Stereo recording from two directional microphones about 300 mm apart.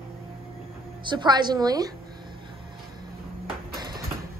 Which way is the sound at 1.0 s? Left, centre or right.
Centre.